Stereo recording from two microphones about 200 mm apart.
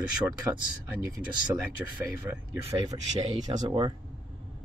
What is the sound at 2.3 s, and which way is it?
Speech, 10° right (ahead or behind).